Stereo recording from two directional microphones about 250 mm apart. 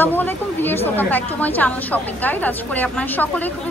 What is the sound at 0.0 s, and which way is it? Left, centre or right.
A woman's voice, centre.